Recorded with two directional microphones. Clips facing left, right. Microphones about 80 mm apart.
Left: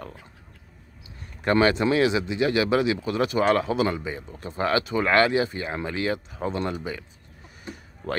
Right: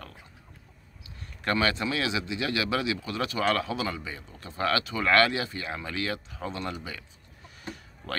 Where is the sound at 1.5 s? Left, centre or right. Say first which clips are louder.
Left 9 dB; left.